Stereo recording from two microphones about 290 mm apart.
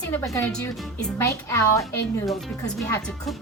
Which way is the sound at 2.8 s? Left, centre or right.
Centre.